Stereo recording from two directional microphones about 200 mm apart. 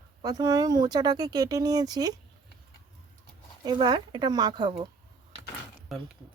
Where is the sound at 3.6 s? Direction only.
20° right (ahead or behind).